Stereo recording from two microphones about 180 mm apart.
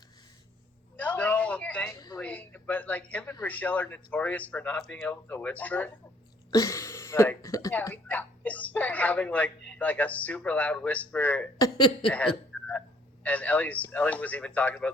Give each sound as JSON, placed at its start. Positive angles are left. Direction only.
{"t": 0.9, "sound": "a sound", "side_deg": 5}
{"t": 2.1, "sound": "speech", "side_deg": 10}
{"t": 11.5, "sound": "speech", "side_deg": 20}
{"t": 12.0, "sound": "speech", "side_deg": 5}